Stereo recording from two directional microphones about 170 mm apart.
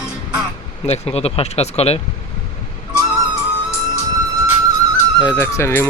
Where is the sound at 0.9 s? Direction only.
35° left (ahead or behind).